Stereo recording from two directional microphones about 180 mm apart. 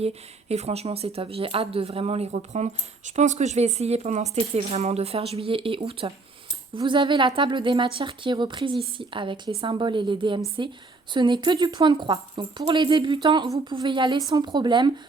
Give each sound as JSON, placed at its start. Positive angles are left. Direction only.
{"t": 0.0, "sound": "speech", "side_deg": -35}